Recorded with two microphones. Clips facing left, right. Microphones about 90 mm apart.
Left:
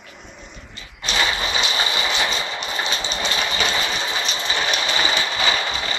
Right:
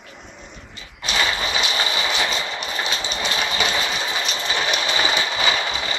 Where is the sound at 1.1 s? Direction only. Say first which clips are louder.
Even; centre (ahead or behind).